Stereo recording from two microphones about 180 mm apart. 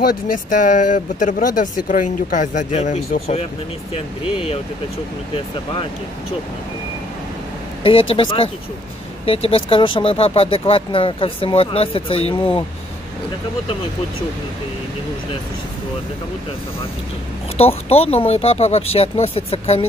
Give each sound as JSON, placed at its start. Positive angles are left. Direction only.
{"t": 0.0, "sound": "speech", "side_deg": 50}
{"t": 7.8, "sound": "speech", "side_deg": 30}
{"t": 17.6, "sound": "speech", "side_deg": 35}